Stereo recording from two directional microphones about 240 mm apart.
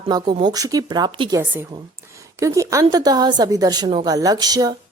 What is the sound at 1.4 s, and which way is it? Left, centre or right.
Speech, centre.